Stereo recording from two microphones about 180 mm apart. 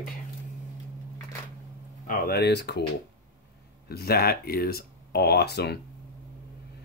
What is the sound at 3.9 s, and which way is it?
Speech, 60° left (ahead or behind).